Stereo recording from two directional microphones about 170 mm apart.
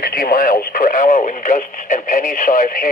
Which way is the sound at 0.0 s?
60° left (ahead or behind).